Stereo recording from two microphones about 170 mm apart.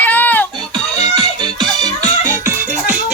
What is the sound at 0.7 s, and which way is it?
Music, 25° right (ahead or behind).